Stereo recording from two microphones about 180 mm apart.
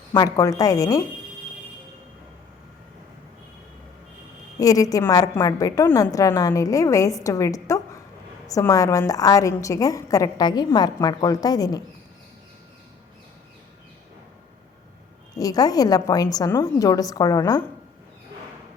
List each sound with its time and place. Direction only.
0.1 s a woman's voice: 20° left (ahead or behind)
4.6 s a woman's voice: 20° left (ahead or behind)
15.4 s a woman's voice: 20° left (ahead or behind)